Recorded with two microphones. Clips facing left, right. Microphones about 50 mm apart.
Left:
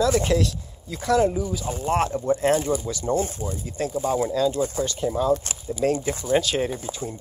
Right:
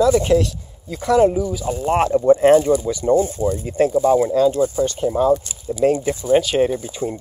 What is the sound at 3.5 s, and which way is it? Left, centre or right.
Speech, right.